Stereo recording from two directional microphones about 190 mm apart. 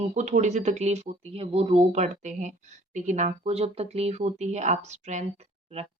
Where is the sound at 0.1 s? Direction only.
40° right (ahead or behind).